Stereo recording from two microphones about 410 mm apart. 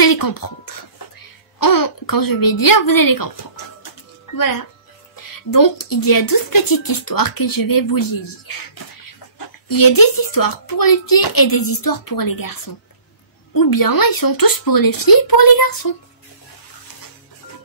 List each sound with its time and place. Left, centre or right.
0.0 s a sound: left
1.6 s speech: left
4.4 s speech: left
9.7 s speech: left